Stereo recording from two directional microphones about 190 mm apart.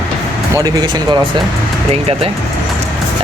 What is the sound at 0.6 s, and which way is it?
Speech, 20° right (ahead or behind).